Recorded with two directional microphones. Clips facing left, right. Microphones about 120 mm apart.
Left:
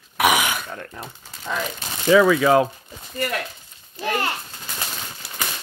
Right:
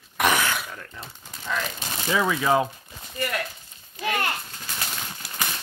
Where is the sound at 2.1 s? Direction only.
90° left.